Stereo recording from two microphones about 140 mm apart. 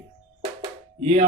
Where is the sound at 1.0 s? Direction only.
45° right (ahead or behind).